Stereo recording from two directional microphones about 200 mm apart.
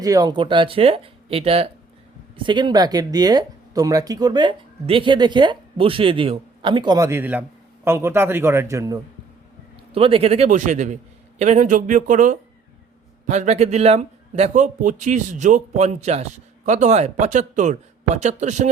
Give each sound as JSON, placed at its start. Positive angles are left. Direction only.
{"t": 0.0, "sound": "a man's voice", "side_deg": -20}
{"t": 9.9, "sound": "a man's voice", "side_deg": -30}